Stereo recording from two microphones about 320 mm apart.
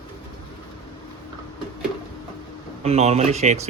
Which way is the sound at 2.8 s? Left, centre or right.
Centre.